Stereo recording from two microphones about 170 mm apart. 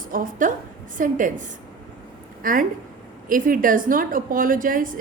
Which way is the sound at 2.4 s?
55° right (ahead or behind).